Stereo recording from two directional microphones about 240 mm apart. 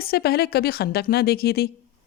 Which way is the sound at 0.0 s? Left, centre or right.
Left.